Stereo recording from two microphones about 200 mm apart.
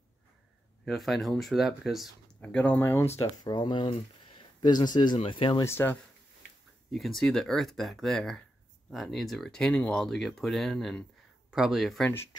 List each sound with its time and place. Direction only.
0.8 s speech: centre (ahead or behind); by 5.7 s 25° left (ahead or behind)
5.7 s speech: 10° left (ahead or behind)